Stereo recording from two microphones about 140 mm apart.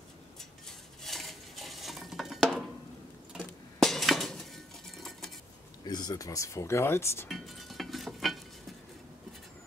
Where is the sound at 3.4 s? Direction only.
5° left (ahead or behind).